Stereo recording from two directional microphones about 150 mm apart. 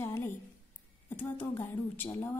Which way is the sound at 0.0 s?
15° left (ahead or behind).